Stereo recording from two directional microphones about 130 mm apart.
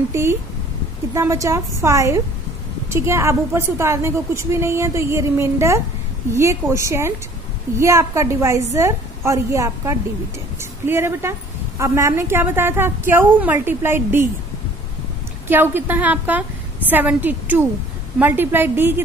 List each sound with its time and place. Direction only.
0.1 s a woman's voice: 20° right (ahead or behind)
15.4 s a woman's voice: 15° right (ahead or behind)